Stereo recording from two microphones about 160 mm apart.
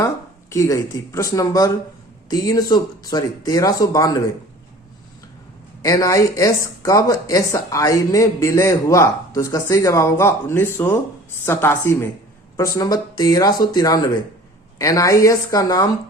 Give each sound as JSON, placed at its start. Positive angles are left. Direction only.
{"t": 0.5, "sound": "speech", "side_deg": 20}
{"t": 5.8, "sound": "a woman's voice", "side_deg": 20}